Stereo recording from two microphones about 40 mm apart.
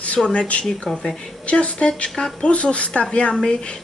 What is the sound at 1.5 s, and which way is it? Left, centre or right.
A woman's voice, left.